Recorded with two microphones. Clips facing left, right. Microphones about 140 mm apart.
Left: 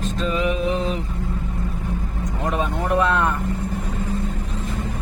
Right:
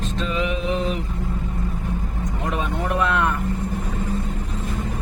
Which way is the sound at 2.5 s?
35° left (ahead or behind).